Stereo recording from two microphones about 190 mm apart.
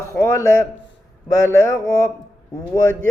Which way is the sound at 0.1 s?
15° left (ahead or behind).